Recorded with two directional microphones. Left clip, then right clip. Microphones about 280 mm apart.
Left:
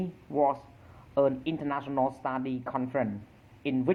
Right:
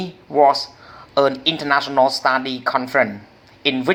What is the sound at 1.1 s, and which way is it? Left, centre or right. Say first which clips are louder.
Speech: right 10 dB; right.